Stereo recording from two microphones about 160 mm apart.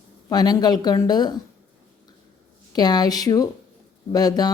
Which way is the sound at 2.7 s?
25° left (ahead or behind).